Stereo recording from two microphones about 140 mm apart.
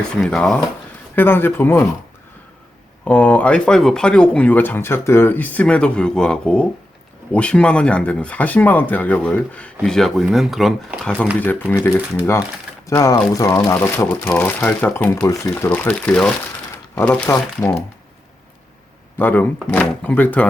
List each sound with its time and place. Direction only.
0.0 s speech: 5° left (ahead or behind)
3.0 s speech: 10° left (ahead or behind)
11.8 s speech: 20° left (ahead or behind)
19.2 s speech: 10° left (ahead or behind)